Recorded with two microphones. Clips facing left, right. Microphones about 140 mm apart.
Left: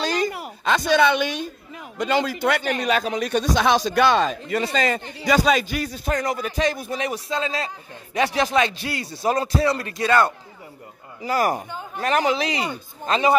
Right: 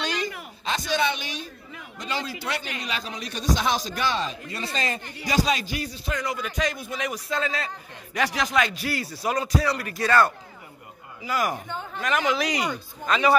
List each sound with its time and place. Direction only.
0.0 s a sound: 40° left (ahead or behind)
0.4 s a woman's voice: 65° left (ahead or behind)
5.2 s a man's voice: 50° left (ahead or behind); by 10.3 s 20° left (ahead or behind)
11.2 s a man's voice: 40° left (ahead or behind)